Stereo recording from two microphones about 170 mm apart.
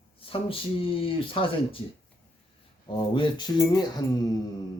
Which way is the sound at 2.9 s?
30° left (ahead or behind).